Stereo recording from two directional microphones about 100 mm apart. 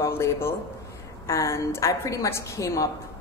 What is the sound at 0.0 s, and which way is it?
A man's voice, 25° left (ahead or behind).